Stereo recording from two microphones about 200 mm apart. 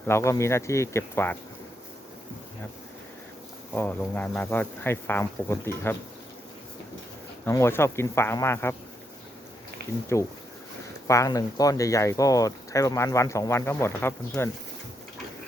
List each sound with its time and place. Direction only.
0.1 s speech: 15° left (ahead or behind)
3.7 s speech: 10° left (ahead or behind)
7.4 s speech: 15° left (ahead or behind)
11.1 s speech: 15° left (ahead or behind)